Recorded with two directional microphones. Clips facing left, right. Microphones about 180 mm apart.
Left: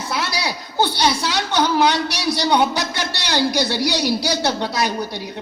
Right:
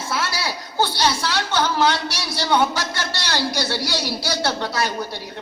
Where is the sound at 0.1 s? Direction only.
15° left (ahead or behind).